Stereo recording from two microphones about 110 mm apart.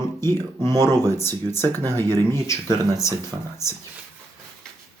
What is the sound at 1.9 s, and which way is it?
Speech, 20° left (ahead or behind).